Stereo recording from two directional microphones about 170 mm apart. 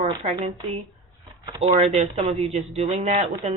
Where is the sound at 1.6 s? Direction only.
35° right (ahead or behind).